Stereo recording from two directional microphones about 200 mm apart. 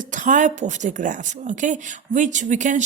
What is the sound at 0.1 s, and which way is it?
A woman's voice, 40° right (ahead or behind).